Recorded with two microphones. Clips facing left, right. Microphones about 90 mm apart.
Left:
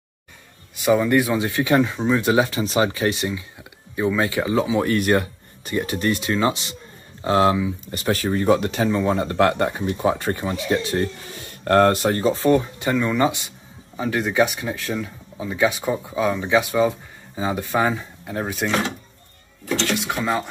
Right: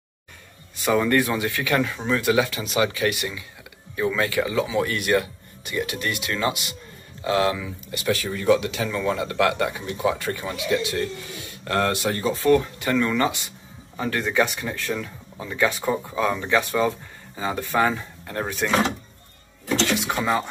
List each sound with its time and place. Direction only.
0.8 s speech: 10° left (ahead or behind)
1.3 s speech: 25° left (ahead or behind)
2.2 s speech: 35° left (ahead or behind)
4.6 s speech: 35° left (ahead or behind)
8.9 s speech: 30° left (ahead or behind)
13.9 s speech: 5° left (ahead or behind)
19.9 s speech: centre (ahead or behind)